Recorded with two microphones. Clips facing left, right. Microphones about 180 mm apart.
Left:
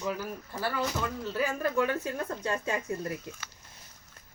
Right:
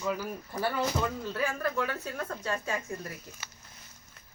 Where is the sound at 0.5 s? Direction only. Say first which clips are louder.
Right 2 dB; 15° right (ahead or behind).